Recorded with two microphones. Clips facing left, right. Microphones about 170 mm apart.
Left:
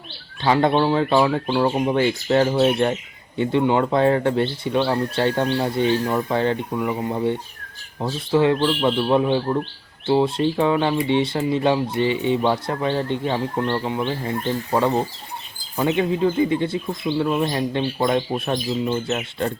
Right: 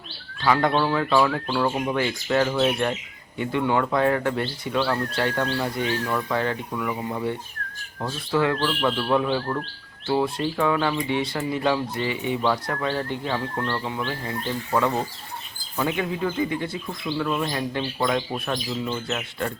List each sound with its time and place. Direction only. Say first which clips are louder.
0.4 s speech: left 3 dB; 25° left (ahead or behind)